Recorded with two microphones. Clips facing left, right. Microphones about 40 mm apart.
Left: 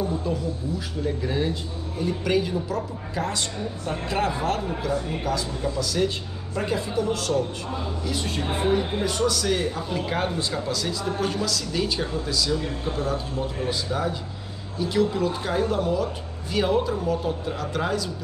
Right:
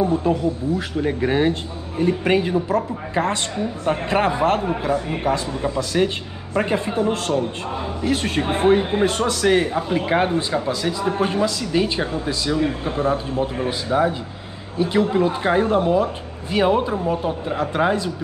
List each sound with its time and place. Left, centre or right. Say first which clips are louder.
0.0 s a man's voice: right 8 dB; right
8.1 s a man's voice: right 8 dB; right